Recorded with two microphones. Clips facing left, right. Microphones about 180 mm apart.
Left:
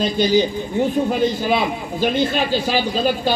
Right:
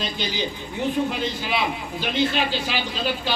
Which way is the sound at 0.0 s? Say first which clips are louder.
Left 11 dB; 45° left (ahead or behind).